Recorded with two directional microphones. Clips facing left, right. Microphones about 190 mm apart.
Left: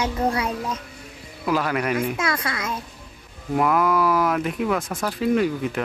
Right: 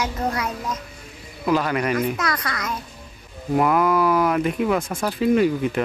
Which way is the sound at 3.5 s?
Centre (ahead or behind).